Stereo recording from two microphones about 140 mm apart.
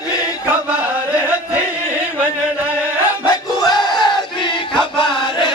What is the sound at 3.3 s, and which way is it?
Battle cry, 30° left (ahead or behind).